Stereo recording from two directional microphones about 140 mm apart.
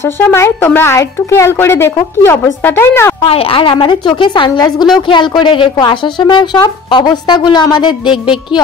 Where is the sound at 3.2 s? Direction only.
40° left (ahead or behind).